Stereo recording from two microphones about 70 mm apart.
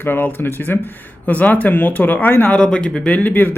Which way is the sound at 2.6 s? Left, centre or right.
Centre.